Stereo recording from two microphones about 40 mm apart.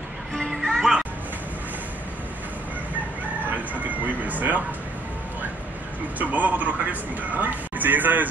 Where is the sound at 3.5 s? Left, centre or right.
Right.